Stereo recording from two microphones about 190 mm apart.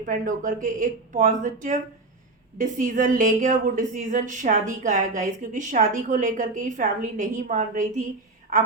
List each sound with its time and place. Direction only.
0.0 s a woman's voice: 45° right (ahead or behind)